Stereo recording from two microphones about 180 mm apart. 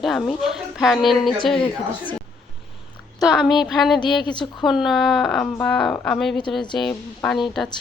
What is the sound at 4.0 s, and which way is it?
Speech, 25° left (ahead or behind).